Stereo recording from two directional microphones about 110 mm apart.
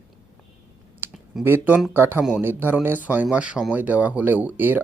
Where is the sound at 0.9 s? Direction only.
20° right (ahead or behind).